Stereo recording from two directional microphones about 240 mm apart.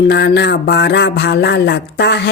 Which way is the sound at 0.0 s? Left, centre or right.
Left.